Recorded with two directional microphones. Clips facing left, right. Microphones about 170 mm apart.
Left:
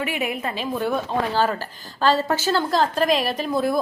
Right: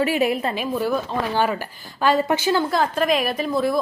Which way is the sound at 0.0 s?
35° right (ahead or behind).